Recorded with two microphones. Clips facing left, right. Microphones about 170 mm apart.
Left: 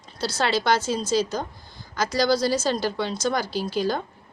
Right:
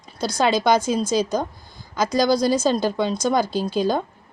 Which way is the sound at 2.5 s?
20° right (ahead or behind).